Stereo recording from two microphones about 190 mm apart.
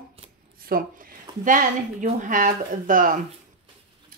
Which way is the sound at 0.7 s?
50° right (ahead or behind).